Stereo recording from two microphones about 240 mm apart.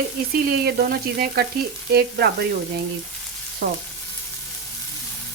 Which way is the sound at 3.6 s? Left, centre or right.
Right.